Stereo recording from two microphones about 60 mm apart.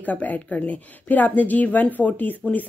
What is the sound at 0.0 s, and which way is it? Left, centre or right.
Speech, left.